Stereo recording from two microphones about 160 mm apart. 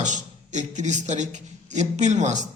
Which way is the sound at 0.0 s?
50° right (ahead or behind).